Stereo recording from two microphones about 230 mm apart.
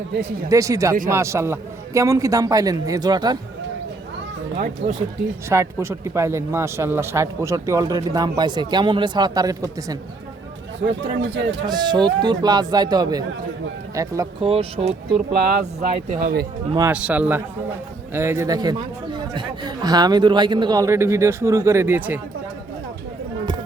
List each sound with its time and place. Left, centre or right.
0.5 s a man's voice: centre
4.5 s speech: right
5.5 s a man's voice: centre
11.6 s a man's voice: centre
14.4 s speech: right
16.7 s a man's voice: centre